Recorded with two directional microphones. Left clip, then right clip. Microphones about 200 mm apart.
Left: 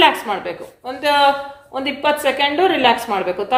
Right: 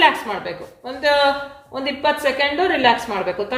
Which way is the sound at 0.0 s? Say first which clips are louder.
Left 2 dB; 35° left (ahead or behind).